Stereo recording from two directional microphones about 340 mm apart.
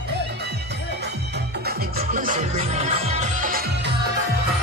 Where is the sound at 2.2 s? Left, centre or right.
Right.